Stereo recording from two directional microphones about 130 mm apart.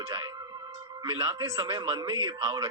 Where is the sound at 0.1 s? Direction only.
35° right (ahead or behind).